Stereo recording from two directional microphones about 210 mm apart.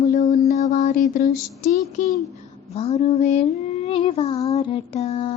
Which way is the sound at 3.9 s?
25° left (ahead or behind).